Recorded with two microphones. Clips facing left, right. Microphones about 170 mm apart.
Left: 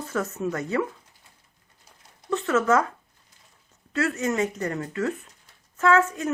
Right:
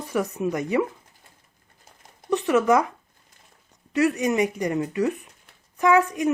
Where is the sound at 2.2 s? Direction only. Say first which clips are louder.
Right 3 dB; 15° right (ahead or behind).